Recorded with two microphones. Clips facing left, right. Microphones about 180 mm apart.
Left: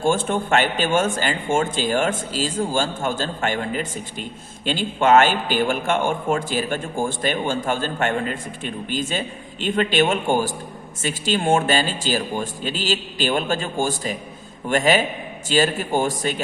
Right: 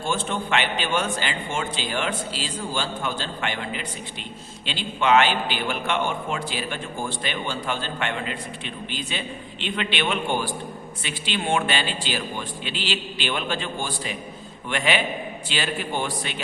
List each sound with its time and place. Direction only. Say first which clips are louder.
0.0 s speech: left 6 dB; 50° left (ahead or behind)